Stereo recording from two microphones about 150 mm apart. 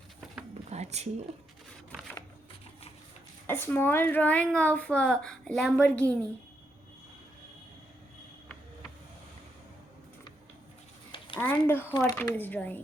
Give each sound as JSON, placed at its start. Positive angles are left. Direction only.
{"t": 0.7, "sound": "a sound", "side_deg": -45}
{"t": 3.4, "sound": "a woman's voice", "side_deg": 15}
{"t": 11.3, "sound": "a woman's voice", "side_deg": 15}